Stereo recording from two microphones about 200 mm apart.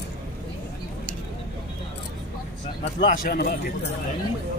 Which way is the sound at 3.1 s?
45° left (ahead or behind).